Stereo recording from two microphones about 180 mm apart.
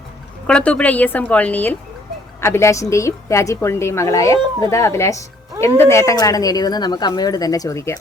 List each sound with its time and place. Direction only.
0.4 s a woman's voice: 5° left (ahead or behind)